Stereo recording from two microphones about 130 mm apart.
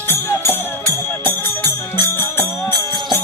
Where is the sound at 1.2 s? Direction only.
15° left (ahead or behind).